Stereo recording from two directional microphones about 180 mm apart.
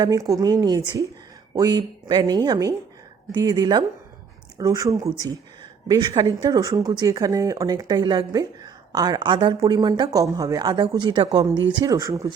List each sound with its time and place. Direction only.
0.0 s speech: 20° right (ahead or behind)